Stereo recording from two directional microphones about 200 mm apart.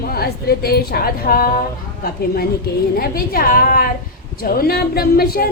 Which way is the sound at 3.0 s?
45° left (ahead or behind).